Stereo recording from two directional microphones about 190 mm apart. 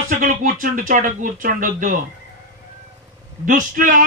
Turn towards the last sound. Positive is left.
turn(degrees=-45)  # may be behind; listen again after turning